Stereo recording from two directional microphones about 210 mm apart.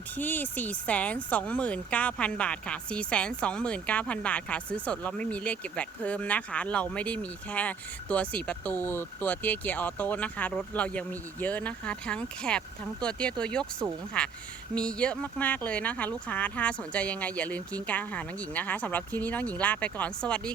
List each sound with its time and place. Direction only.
0.2 s speech: 10° left (ahead or behind)